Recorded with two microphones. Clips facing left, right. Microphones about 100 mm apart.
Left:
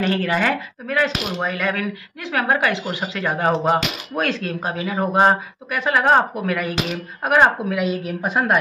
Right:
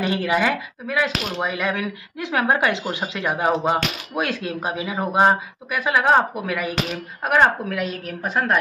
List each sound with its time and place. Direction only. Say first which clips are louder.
0.0 s speech: left 1 dB; 15° right (ahead or behind)
1.4 s speech: left 1 dB; 15° right (ahead or behind); by 8.5 s 10° left (ahead or behind)